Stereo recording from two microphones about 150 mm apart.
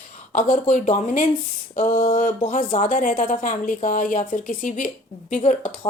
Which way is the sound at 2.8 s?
65° left (ahead or behind).